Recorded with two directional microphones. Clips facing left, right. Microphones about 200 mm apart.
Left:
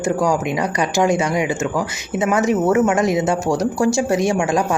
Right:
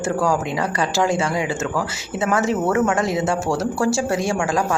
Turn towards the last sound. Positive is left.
turn(degrees=20)  # may be behind; listen again after turning